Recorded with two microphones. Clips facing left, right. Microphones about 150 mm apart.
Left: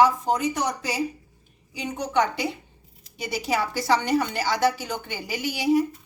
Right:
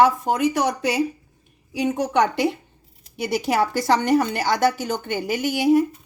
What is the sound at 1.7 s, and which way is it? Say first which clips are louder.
A woman's voice: right 4 dB; 50° right (ahead or behind).